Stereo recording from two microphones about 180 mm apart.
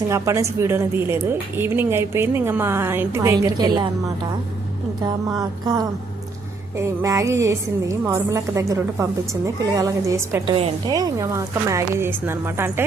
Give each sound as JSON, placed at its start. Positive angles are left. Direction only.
{"t": 0.1, "sound": "a woman's voice", "side_deg": -15}
{"t": 4.9, "sound": "music", "side_deg": -20}
{"t": 6.7, "sound": "a woman's voice", "side_deg": -15}